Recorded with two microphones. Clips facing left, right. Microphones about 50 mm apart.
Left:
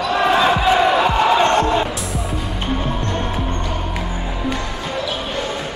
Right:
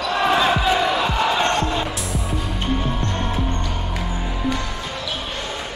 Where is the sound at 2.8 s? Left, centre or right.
Centre.